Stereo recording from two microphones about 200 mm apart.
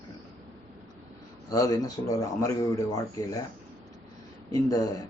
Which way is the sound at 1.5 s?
20° left (ahead or behind).